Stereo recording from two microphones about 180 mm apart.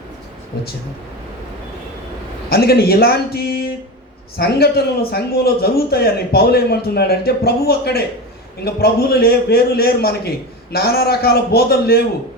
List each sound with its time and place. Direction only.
2.5 s a man's voice: 60° left (ahead or behind)